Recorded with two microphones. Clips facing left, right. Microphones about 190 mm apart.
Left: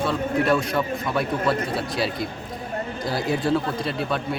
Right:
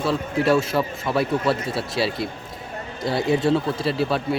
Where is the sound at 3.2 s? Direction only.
25° right (ahead or behind).